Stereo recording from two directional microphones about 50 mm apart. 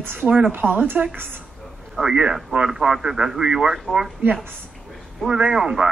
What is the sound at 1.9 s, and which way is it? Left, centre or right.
A man's voice, centre.